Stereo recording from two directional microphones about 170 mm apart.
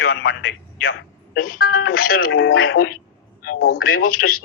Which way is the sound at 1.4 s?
60° left (ahead or behind).